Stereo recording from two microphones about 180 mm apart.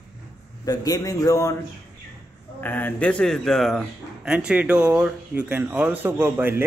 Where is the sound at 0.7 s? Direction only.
20° left (ahead or behind).